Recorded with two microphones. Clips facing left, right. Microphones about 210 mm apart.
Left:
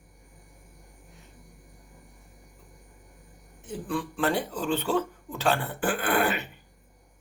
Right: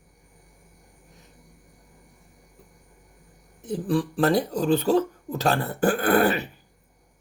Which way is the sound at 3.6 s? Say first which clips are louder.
Right 7 dB; 35° right (ahead or behind).